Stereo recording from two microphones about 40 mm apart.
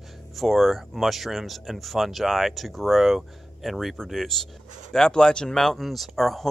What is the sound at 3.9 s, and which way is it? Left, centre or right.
Speech, centre.